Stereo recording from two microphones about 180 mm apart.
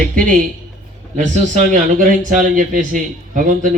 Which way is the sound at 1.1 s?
40° right (ahead or behind).